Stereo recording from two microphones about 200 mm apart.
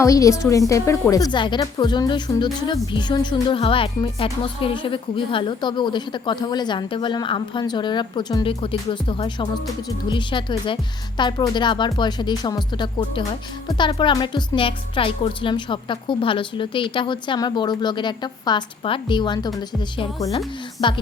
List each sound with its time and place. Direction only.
0.0 s a woman's voice: 15° left (ahead or behind)